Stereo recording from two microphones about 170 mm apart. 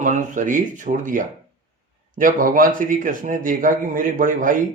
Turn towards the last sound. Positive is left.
turn(degrees=-50)  # may be behind; listen again after turning